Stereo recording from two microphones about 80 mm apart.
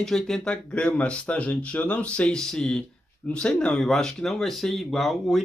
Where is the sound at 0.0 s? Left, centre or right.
Centre.